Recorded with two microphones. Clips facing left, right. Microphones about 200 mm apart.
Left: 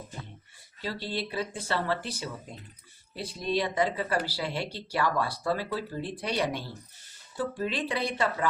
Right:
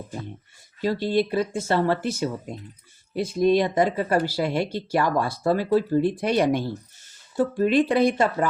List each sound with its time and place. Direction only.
0.8 s speech: 45° right (ahead or behind)